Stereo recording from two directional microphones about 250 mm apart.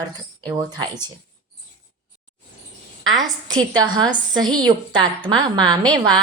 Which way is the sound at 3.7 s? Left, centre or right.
Centre.